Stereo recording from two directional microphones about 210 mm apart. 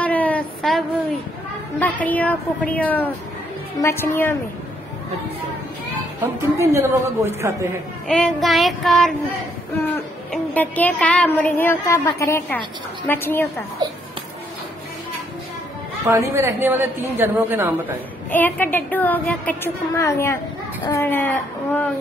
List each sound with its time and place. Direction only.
0.0 s a sound: 5° left (ahead or behind)
1.8 s a woman's voice: 10° left (ahead or behind)
6.2 s a woman's voice: 15° right (ahead or behind)
8.1 s child singing: centre (ahead or behind)
10.3 s a woman's voice: 5° left (ahead or behind)
16.1 s a woman's voice: 15° right (ahead or behind)
18.3 s a woman's voice: 10° left (ahead or behind)